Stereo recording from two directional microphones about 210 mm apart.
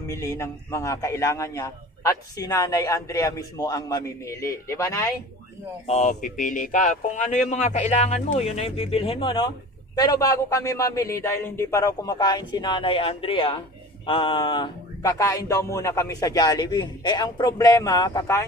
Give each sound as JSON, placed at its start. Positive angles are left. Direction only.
{"t": 0.0, "sound": "speech", "side_deg": 15}
{"t": 5.9, "sound": "speech", "side_deg": 30}